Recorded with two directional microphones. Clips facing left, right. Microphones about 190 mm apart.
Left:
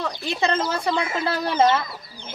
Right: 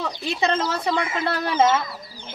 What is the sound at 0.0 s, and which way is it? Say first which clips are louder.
Speech: even; centre (ahead or behind).